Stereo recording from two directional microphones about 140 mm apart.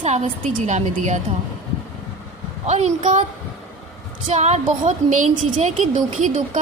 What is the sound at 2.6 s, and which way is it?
Speech, 55° right (ahead or behind).